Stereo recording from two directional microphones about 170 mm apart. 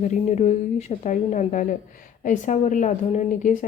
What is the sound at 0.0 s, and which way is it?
A woman's voice, 40° left (ahead or behind).